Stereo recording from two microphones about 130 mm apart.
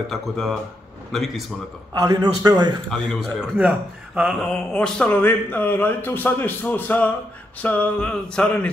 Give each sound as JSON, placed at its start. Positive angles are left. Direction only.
{"t": 0.1, "sound": "speech", "side_deg": 5}
{"t": 2.0, "sound": "a man's voice", "side_deg": -30}
{"t": 2.9, "sound": "speech", "side_deg": 0}
{"t": 4.5, "sound": "speech", "side_deg": 5}